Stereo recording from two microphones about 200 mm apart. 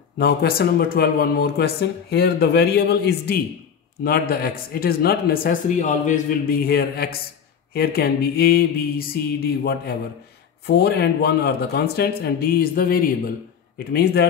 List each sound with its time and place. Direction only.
0.2 s a man's voice: 50° left (ahead or behind)